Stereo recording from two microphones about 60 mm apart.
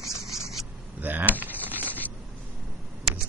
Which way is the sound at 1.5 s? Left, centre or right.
Left.